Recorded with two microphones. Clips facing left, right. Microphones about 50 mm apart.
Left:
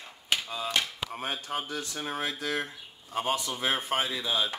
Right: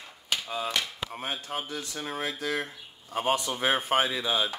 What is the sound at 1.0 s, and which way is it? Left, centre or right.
Speech, centre.